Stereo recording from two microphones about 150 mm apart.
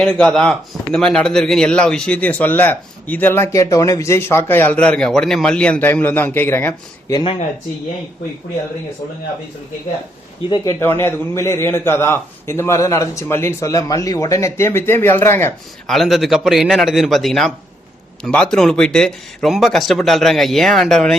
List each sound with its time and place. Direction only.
0.0 s speech: 5° left (ahead or behind)
10.5 s speech: 25° left (ahead or behind)
10.8 s speech: 15° left (ahead or behind)
15.9 s a man's voice: centre (ahead or behind)